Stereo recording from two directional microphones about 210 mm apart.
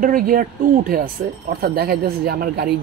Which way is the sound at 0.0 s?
40° right (ahead or behind).